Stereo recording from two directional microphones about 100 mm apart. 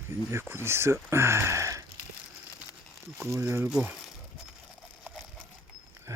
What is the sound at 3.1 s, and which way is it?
Speech, 25° right (ahead or behind).